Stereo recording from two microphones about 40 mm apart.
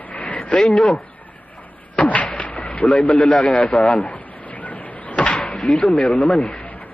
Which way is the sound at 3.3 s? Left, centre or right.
Left.